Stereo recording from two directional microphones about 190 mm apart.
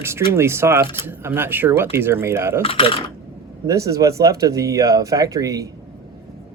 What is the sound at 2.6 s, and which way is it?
Speech, 30° left (ahead or behind).